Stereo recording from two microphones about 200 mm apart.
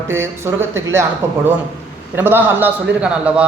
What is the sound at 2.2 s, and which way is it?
A man's voice, 10° right (ahead or behind).